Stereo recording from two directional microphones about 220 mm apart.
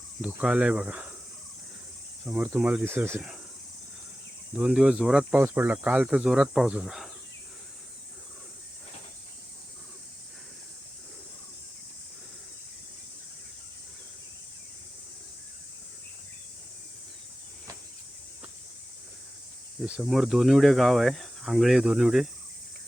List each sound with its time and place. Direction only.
0.2 s speech: centre (ahead or behind)
2.2 s speech: 5° right (ahead or behind)
4.5 s speech: 5° right (ahead or behind)
19.8 s speech: centre (ahead or behind)